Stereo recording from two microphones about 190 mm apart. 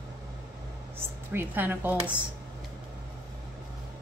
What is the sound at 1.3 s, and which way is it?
Speech, 10° right (ahead or behind).